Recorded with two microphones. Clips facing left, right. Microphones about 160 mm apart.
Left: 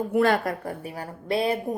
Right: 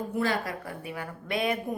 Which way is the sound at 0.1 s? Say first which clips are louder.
Left 8 dB; 60° left (ahead or behind).